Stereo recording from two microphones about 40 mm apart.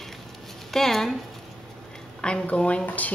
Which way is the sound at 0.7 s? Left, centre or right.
Centre.